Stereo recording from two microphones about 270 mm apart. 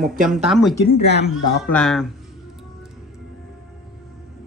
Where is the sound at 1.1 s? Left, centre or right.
Left.